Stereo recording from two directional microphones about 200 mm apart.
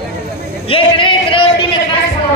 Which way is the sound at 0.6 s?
25° left (ahead or behind).